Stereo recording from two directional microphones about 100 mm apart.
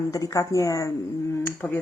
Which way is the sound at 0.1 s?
35° left (ahead or behind).